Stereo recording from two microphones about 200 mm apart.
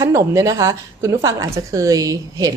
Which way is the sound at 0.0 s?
15° right (ahead or behind).